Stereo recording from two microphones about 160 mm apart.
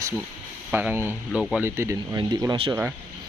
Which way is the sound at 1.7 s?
15° right (ahead or behind).